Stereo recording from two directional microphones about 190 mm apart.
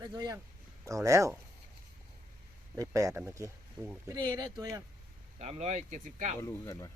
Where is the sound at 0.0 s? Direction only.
20° right (ahead or behind).